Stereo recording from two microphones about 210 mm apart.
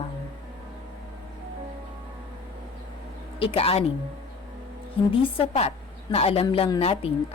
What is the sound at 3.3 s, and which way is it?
Speech, 25° left (ahead or behind).